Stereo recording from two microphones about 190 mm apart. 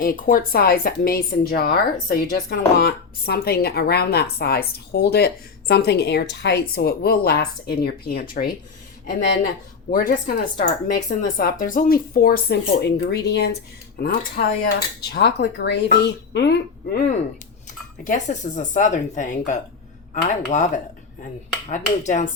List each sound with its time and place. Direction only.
0.0 s a woman's voice: 50° left (ahead or behind)
9.9 s a woman's voice: 45° left (ahead or behind)